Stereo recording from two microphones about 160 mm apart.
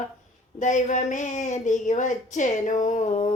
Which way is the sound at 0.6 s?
50° left (ahead or behind).